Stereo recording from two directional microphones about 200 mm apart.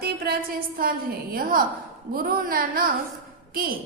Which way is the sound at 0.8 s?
50° right (ahead or behind).